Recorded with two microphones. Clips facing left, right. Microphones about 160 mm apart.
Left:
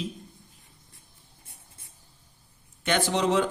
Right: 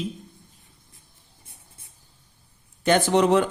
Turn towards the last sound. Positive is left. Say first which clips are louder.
# right 5 dB
turn(degrees=-55)  # may be behind; listen again after turning